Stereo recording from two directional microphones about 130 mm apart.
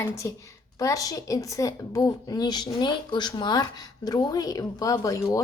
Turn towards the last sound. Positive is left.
turn(degrees=25)  # may be behind; listen again after turning